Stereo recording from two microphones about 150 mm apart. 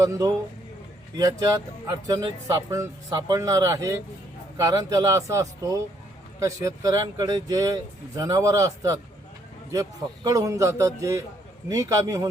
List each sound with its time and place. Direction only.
0.0 s speech: 25° right (ahead or behind)
10.2 s speech: 20° right (ahead or behind)